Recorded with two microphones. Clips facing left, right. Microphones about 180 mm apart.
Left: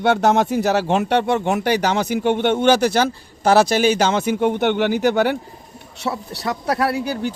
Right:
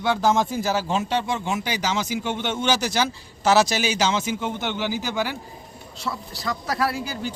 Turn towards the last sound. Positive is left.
turn(degrees=65)  # may be behind; listen again after turning